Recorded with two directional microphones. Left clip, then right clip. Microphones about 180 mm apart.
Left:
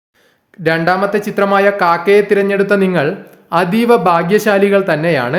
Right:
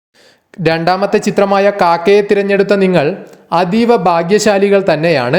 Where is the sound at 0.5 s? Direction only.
35° right (ahead or behind).